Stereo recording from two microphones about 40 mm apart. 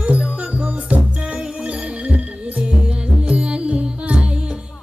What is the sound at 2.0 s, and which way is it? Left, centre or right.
Music, right.